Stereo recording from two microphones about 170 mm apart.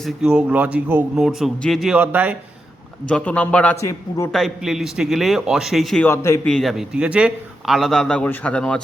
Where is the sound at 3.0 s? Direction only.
10° left (ahead or behind).